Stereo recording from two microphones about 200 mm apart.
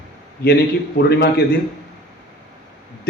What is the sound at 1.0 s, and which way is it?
Speech, 55° left (ahead or behind).